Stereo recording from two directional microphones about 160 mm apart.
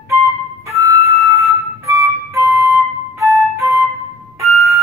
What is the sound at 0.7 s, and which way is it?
Flute, 20° right (ahead or behind).